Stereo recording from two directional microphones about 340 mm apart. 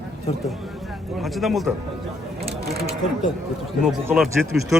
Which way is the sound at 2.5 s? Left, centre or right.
Right.